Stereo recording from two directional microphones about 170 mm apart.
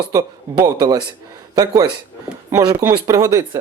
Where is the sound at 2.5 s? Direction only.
15° right (ahead or behind).